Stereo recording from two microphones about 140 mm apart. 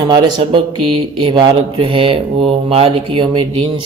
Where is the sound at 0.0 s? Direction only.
30° right (ahead or behind).